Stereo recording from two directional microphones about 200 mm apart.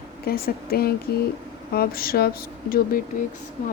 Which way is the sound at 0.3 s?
50° left (ahead or behind).